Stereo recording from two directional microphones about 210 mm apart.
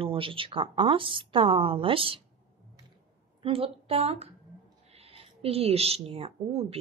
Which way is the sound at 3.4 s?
25° right (ahead or behind).